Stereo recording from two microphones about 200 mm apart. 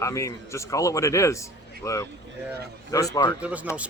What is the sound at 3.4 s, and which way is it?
Speech, 5° right (ahead or behind).